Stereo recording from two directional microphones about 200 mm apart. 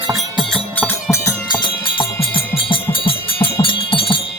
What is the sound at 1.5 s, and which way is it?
Music, 25° left (ahead or behind).